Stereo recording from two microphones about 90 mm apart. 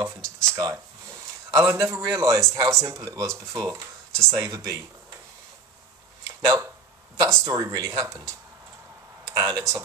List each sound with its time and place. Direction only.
0.0 s a sound: 30° right (ahead or behind)
0.5 s speech: 40° right (ahead or behind)
1.5 s speech: 30° right (ahead or behind)
6.4 s speech: 40° right (ahead or behind)
9.4 s speech: 35° right (ahead or behind)